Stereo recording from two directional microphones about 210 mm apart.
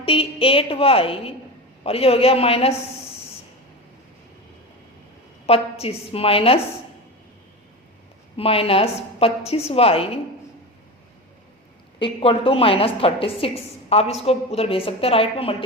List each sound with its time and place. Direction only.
0.0 s a woman's voice: 25° left (ahead or behind)
5.5 s a woman's voice: 30° left (ahead or behind)
8.4 s a woman's voice: 25° left (ahead or behind)
11.9 s a woman's voice: 25° left (ahead or behind)